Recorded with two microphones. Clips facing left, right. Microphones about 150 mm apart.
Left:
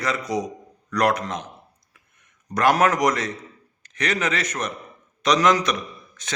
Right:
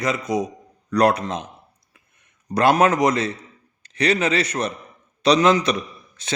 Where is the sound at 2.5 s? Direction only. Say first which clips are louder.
Right 2 dB; 25° right (ahead or behind).